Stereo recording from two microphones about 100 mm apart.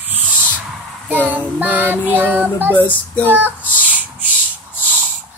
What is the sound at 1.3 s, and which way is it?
Music, 15° right (ahead or behind).